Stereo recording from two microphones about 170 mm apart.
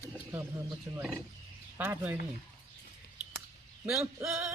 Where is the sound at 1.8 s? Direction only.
10° right (ahead or behind).